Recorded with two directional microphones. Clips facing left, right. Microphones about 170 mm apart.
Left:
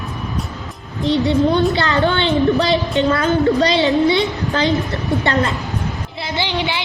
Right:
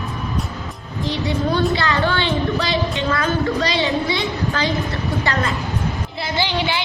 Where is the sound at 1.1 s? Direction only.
25° left (ahead or behind).